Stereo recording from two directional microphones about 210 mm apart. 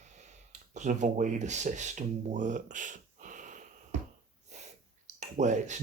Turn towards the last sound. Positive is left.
turn(degrees=-35)  # may be behind; listen again after turning